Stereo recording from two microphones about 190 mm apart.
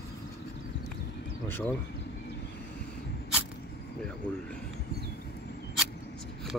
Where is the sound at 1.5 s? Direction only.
10° left (ahead or behind).